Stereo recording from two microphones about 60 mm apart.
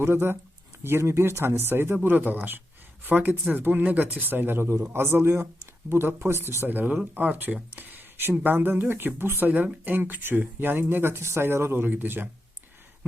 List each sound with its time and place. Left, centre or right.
0.0 s speech: right
6.7 s speech: right
9.5 s speech: right